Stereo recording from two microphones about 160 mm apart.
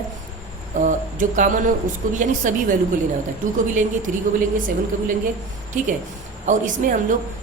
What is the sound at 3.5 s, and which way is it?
Speech, 55° right (ahead or behind).